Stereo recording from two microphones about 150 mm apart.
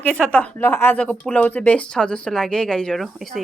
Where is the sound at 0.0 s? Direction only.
5° left (ahead or behind).